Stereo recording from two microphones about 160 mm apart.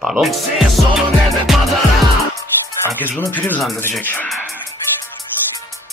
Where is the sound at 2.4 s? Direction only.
15° left (ahead or behind).